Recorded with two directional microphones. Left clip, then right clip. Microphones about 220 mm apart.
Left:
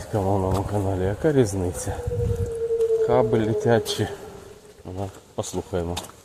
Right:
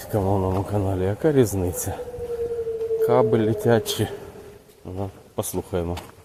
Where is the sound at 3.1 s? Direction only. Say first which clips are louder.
Right 1 dB; 15° right (ahead or behind).